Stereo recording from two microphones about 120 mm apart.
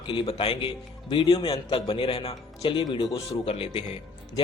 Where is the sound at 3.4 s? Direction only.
55° left (ahead or behind).